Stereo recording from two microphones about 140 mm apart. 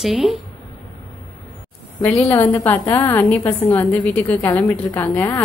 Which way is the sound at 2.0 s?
10° left (ahead or behind).